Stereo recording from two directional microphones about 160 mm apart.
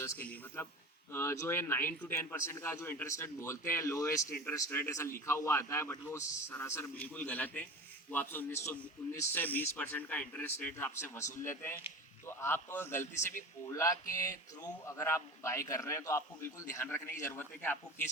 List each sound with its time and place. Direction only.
0.0 s a man's voice: 15° left (ahead or behind)